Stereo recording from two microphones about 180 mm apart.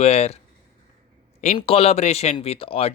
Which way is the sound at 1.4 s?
35° left (ahead or behind).